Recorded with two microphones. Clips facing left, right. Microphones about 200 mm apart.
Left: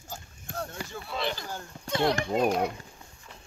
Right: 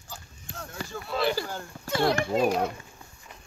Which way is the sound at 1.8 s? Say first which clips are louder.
Right 1 dB; 5° right (ahead or behind).